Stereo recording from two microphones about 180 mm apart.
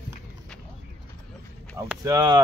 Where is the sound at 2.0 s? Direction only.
20° right (ahead or behind).